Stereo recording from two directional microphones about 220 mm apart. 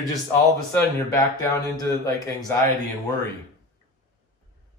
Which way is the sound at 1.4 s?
15° left (ahead or behind).